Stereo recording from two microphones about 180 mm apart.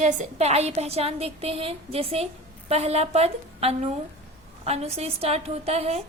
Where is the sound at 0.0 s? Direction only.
40° right (ahead or behind).